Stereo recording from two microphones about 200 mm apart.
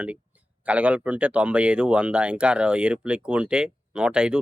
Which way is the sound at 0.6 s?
5° right (ahead or behind).